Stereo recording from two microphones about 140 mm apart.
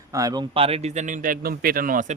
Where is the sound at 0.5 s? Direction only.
45° right (ahead or behind); by 2.1 s 80° right.